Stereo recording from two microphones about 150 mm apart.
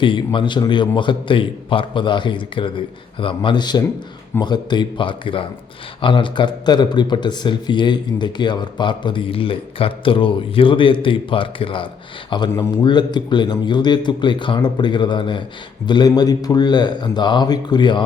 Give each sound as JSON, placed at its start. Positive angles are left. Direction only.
{"t": 0.0, "sound": "a man's voice", "side_deg": 35}